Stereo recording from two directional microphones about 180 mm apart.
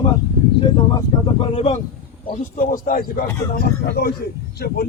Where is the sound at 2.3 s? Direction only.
45° left (ahead or behind).